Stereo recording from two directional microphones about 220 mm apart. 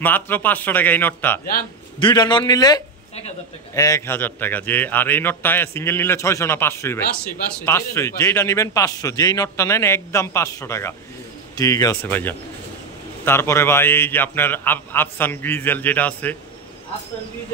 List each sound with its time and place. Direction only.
0.0 s a man's voice: 10° left (ahead or behind)
2.0 s a man's voice: 20° left (ahead or behind)